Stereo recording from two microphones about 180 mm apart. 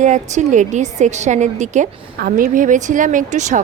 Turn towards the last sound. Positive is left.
turn(degrees=-40)  # may be behind; listen again after turning